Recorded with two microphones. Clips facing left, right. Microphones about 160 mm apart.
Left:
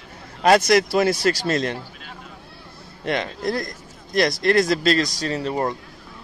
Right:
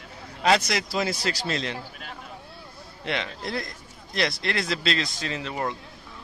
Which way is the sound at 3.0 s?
45° left (ahead or behind).